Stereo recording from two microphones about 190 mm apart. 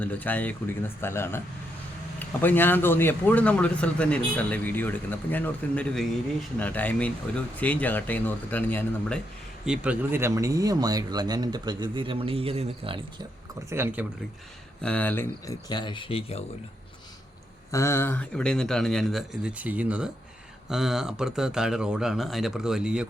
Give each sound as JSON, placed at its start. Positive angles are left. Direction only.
{"t": 0.0, "sound": "speech", "side_deg": 10}
{"t": 9.6, "sound": "speech", "side_deg": -5}
{"t": 13.7, "sound": "speech", "side_deg": -10}
{"t": 14.8, "sound": "speech", "side_deg": 5}
{"t": 15.7, "sound": "speech", "side_deg": 25}
{"t": 17.7, "sound": "speech", "side_deg": 15}